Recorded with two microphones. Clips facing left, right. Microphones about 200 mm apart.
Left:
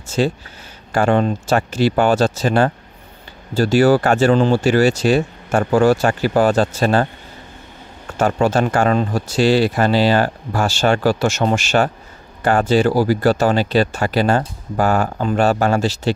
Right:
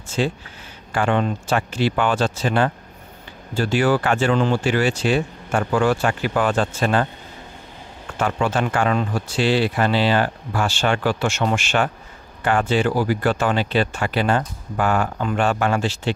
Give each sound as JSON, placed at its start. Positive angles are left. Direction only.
{"t": 0.2, "sound": "speech", "side_deg": 40}
{"t": 8.2, "sound": "speech", "side_deg": 40}